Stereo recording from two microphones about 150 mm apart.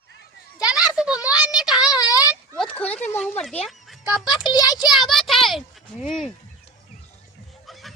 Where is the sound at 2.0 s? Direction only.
25° left (ahead or behind).